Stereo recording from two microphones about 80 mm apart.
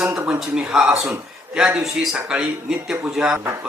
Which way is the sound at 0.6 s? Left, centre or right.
Centre.